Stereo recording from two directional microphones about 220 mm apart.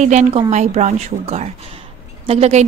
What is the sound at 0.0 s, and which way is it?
A woman's voice, 30° right (ahead or behind).